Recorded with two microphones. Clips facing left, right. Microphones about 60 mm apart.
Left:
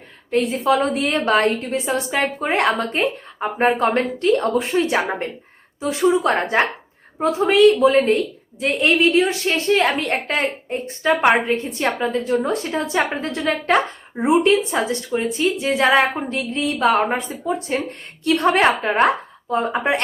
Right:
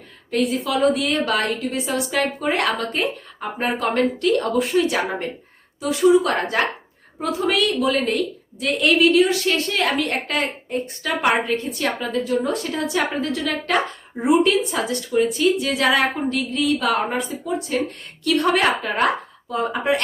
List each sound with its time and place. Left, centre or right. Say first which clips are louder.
0.3 s a woman's voice: left 4 dB; left